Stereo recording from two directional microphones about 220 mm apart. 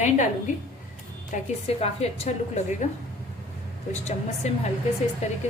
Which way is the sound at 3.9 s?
30° left (ahead or behind).